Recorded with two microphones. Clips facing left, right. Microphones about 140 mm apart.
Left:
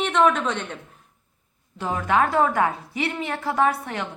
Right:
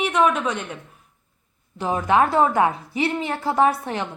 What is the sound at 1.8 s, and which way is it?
A woman's voice, 20° right (ahead or behind).